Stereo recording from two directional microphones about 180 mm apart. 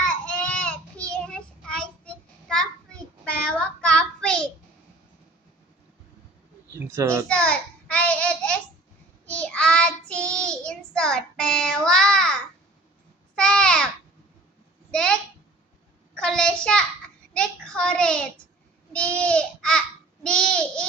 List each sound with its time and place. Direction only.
0.0 s child singing: 5° left (ahead or behind)
6.7 s a child's voice: 15° right (ahead or behind)
7.3 s child singing: 5° left (ahead or behind)
13.3 s babbling: 5° left (ahead or behind)
14.8 s a sound: 5° left (ahead or behind)
16.1 s child singing: 5° left (ahead or behind)
18.9 s babbling: 5° left (ahead or behind)